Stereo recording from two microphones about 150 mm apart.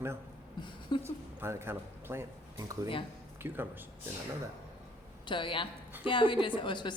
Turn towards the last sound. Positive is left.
turn(degrees=30)  # may be behind; listen again after turning